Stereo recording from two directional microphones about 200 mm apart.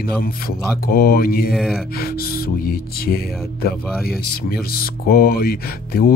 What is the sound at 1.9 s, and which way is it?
Speech, 50° left (ahead or behind).